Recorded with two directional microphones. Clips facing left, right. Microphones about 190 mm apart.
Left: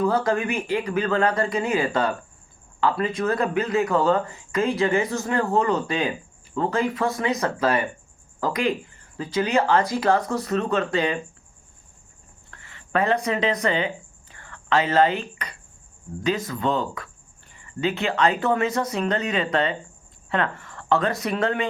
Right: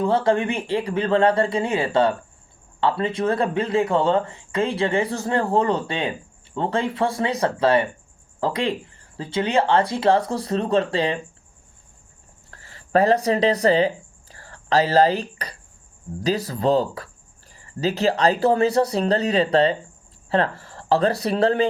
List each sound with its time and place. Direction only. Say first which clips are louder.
0.0 s speech: right 2 dB; 30° right (ahead or behind)
12.5 s a sound: right 5 dB; 35° right (ahead or behind)
16.2 s speech: right 3 dB; 35° right (ahead or behind)